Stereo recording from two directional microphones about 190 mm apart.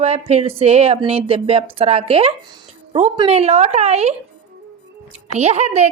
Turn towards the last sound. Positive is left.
turn(degrees=-35)  # may be behind; listen again after turning